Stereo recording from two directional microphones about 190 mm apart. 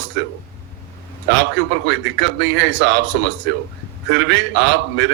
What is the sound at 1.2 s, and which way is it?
A man's voice, 70° right (ahead or behind).